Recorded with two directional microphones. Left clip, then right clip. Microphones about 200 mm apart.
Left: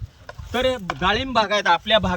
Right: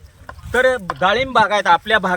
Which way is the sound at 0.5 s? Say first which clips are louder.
Right 6 dB; 15° right (ahead or behind).